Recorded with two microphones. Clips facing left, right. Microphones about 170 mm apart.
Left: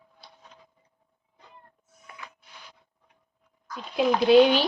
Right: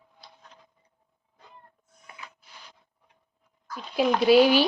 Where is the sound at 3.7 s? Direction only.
Centre (ahead or behind).